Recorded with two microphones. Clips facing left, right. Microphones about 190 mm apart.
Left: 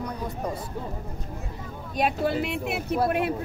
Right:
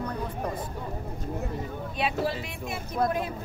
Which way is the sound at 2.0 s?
55° left (ahead or behind).